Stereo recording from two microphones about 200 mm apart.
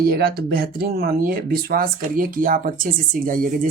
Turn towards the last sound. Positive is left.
turn(degrees=-45)  # may be behind; listen again after turning